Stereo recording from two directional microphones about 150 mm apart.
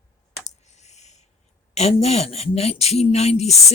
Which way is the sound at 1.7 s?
45° left (ahead or behind).